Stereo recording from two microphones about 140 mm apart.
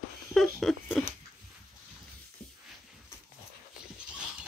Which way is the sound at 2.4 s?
10° left (ahead or behind).